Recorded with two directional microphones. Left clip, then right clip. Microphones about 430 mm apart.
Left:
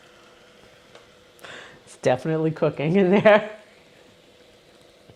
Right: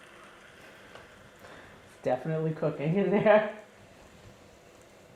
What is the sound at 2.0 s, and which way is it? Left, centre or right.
Speech, left.